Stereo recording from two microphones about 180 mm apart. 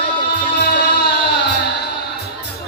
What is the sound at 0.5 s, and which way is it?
Music, 65° left (ahead or behind).